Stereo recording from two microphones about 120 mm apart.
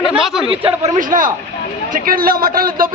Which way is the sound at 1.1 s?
90° right.